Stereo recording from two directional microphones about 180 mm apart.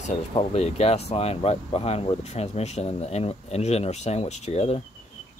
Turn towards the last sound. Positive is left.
turn(degrees=35)  # may be behind; listen again after turning